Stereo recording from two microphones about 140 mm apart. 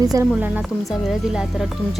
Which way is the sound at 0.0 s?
25° right (ahead or behind).